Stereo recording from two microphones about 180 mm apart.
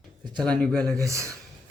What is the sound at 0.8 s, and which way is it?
Speech, 15° right (ahead or behind).